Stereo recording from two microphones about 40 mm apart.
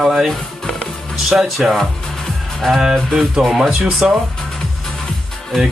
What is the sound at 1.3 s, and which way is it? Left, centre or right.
Speech, right.